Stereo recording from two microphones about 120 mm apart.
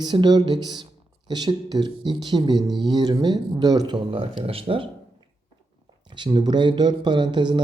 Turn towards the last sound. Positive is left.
turn(degrees=-40)  # may be behind; listen again after turning